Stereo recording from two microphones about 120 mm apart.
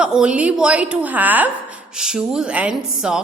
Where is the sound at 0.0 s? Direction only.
5° right (ahead or behind).